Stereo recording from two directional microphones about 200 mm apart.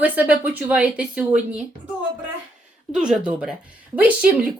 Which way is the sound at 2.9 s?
5° right (ahead or behind).